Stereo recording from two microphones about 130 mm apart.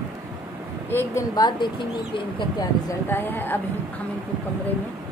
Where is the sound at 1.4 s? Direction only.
35° left (ahead or behind).